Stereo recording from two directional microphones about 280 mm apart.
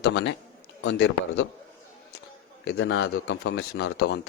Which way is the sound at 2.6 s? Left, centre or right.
Left.